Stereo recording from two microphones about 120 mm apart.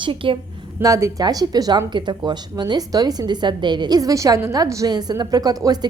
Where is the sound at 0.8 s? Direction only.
25° right (ahead or behind).